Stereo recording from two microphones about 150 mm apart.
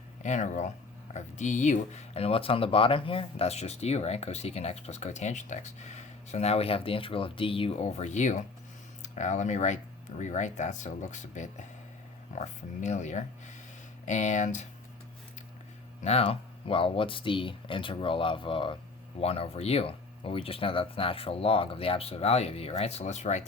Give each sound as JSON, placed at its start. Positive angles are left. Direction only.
{"t": 0.2, "sound": "speech", "side_deg": 55}
{"t": 16.0, "sound": "speech", "side_deg": 45}